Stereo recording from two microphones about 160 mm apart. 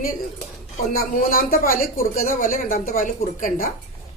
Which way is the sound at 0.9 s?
65° left (ahead or behind).